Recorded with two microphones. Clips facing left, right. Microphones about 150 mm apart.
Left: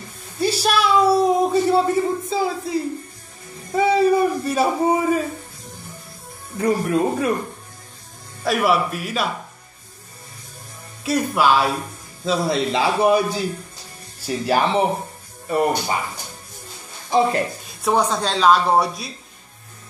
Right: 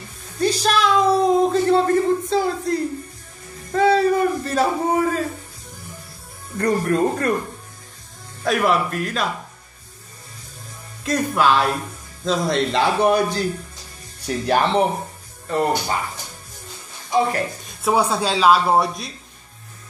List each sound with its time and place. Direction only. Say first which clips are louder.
0.4 s a sound: right 1 dB; 5° left (ahead or behind)
3.7 s speech: even; 10° left (ahead or behind)
6.6 s a man's voice: even; 5° left (ahead or behind)
8.5 s a man's voice: even; 5° left (ahead or behind)
11.1 s a man's voice: even; 5° left (ahead or behind)
17.1 s speech: left 2 dB; 30° left (ahead or behind)
17.8 s a man's voice: even; 5° right (ahead or behind)